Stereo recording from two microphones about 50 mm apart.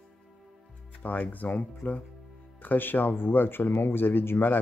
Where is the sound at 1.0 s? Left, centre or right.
Left.